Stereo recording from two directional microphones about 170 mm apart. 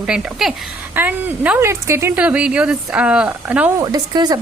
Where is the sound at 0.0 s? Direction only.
5° right (ahead or behind).